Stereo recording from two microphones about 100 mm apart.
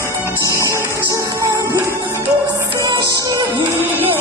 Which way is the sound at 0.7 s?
30° right (ahead or behind).